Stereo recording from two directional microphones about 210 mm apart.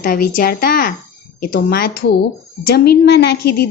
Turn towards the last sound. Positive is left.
turn(degrees=50)  # may be behind; listen again after turning